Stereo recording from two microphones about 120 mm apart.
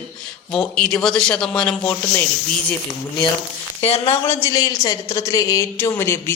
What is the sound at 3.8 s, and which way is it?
Speech, 55° left (ahead or behind).